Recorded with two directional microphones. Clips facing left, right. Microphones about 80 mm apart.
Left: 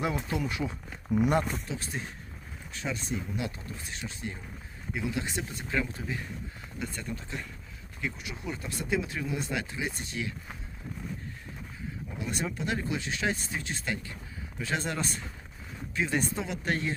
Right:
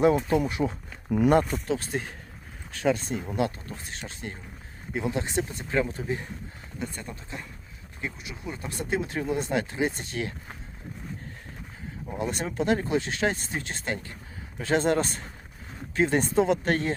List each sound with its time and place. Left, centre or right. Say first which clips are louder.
0.0 s speech: right 9 dB; right
1.1 s speech: right 5 dB; right
3.0 s speech: right 2 dB; right
3.2 s speech: right 7 dB; right
5.7 s speech: right 5 dB; right
12.5 s speech: right 7 dB; right